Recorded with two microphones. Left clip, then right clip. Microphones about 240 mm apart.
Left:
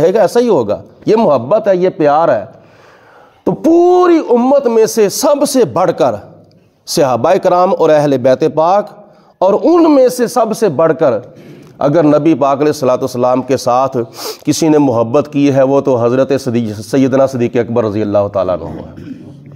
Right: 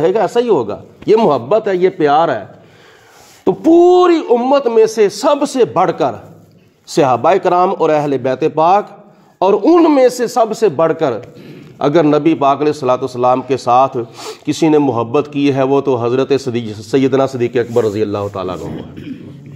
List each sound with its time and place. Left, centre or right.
0.0 s speech: left
3.5 s a man's voice: left